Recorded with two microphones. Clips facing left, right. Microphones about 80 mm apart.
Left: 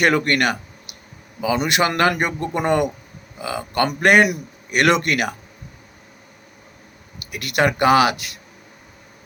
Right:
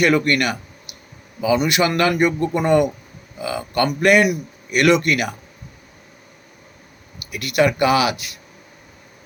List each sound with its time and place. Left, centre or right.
0.0 s speech: left
1.6 s speech: left
2.5 s a man's voice: left
7.3 s speech: left